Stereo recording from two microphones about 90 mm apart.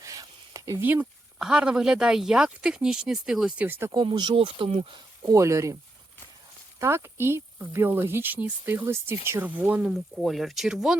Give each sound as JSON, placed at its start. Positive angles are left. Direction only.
{"t": 0.0, "sound": "a sound", "side_deg": -40}
{"t": 0.8, "sound": "speech", "side_deg": -20}
{"t": 1.4, "sound": "speech", "side_deg": -10}
{"t": 3.6, "sound": "speech", "side_deg": -25}
{"t": 3.9, "sound": "speech", "side_deg": -55}
{"t": 4.4, "sound": "speech", "side_deg": -80}
{"t": 5.2, "sound": "speech", "side_deg": -35}
{"t": 6.7, "sound": "speech", "side_deg": -30}
{"t": 9.9, "sound": "speech", "side_deg": 0}